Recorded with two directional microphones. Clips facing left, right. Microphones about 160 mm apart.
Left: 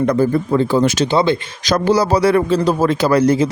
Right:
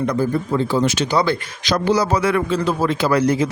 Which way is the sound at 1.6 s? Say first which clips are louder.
Left 3 dB; 40° left (ahead or behind).